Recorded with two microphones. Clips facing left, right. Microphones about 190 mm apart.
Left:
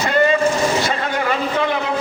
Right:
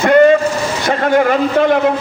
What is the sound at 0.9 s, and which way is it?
Speech, 55° right (ahead or behind).